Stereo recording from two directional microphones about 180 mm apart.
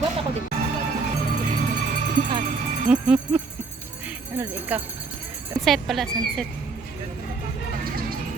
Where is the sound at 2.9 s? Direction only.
5° right (ahead or behind).